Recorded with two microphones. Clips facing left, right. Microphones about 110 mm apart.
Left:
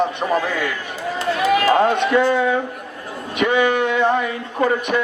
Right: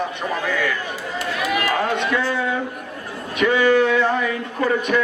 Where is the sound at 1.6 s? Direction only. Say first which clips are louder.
Left 5 dB; 20° left (ahead or behind).